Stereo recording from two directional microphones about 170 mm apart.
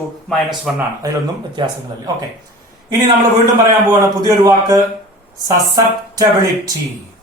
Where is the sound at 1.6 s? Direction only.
25° right (ahead or behind).